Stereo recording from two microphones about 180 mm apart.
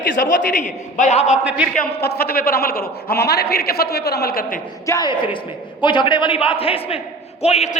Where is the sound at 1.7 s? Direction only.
60° left (ahead or behind).